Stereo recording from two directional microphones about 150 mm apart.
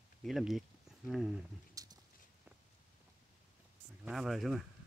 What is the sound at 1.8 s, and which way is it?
Dog, 25° right (ahead or behind).